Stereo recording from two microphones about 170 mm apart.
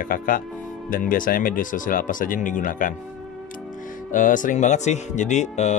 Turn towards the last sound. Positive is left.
turn(degrees=45)  # may be behind; listen again after turning